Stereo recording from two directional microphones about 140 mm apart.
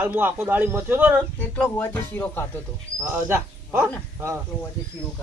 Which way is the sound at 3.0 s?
15° right (ahead or behind).